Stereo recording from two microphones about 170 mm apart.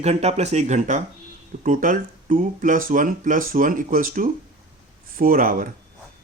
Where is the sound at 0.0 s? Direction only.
40° right (ahead or behind).